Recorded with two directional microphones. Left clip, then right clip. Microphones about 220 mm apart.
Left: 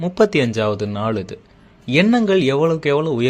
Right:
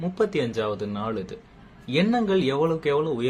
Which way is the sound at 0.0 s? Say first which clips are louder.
Left 9 dB; 40° left (ahead or behind).